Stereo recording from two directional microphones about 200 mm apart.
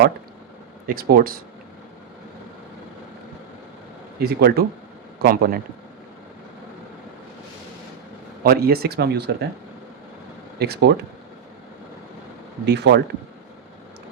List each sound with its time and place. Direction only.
0.9 s speech: 45° right (ahead or behind)
4.2 s speech: 50° right (ahead or behind)
8.4 s speech: 50° right (ahead or behind)
10.6 s speech: 55° right (ahead or behind)
12.6 s speech: 55° right (ahead or behind)